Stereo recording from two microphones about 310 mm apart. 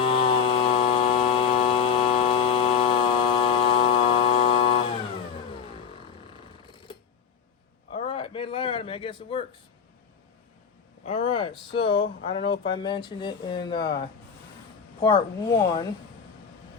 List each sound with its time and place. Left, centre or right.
0.0 s chainsaw: centre
7.9 s a sound: centre
11.0 s speech: centre
15.0 s speech: centre